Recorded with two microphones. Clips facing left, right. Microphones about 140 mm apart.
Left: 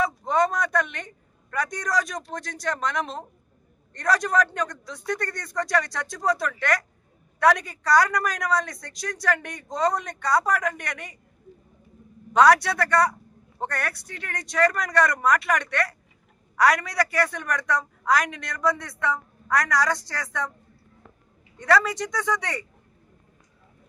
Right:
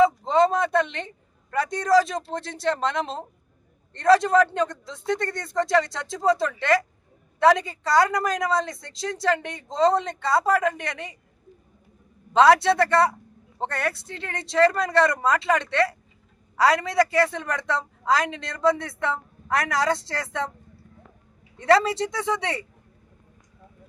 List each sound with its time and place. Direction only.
0.0 s a sound: 25° right (ahead or behind)
3.9 s a woman's voice: 25° right (ahead or behind)
12.3 s a woman's voice: 25° right (ahead or behind)
21.6 s a woman's voice: 25° right (ahead or behind)